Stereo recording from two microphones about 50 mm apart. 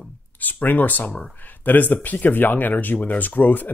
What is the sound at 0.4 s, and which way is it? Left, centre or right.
Speech, left.